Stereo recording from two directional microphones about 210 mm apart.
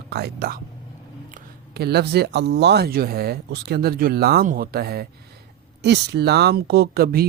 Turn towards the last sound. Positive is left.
turn(degrees=-45)  # may be behind; listen again after turning